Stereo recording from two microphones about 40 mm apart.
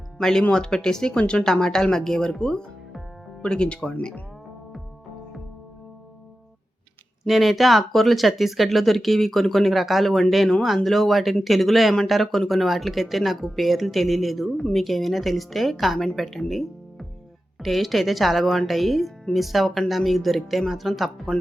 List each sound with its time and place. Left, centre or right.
0.2 s speech: centre
7.3 s speech: centre